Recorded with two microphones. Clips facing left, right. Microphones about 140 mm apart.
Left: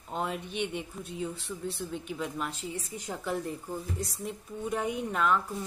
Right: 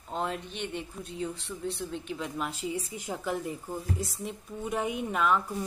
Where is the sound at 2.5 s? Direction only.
10° right (ahead or behind).